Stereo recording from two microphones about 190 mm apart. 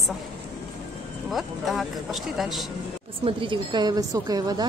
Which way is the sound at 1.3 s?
Centre (ahead or behind).